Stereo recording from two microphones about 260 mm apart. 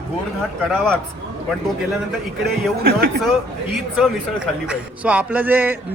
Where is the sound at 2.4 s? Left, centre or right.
Right.